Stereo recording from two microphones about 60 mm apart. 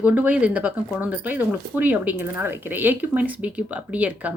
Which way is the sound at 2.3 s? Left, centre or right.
Right.